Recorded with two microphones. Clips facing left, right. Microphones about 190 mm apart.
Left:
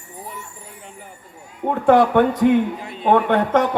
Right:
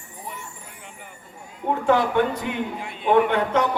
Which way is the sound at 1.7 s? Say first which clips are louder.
Left 6 dB; 65° left (ahead or behind).